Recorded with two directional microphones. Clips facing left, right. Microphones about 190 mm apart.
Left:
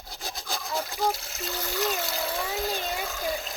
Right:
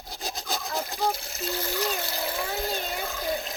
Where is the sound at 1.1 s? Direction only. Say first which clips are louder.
Right 3 dB; centre (ahead or behind).